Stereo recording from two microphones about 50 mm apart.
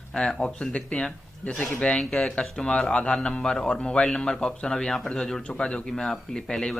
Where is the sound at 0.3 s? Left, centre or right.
Centre.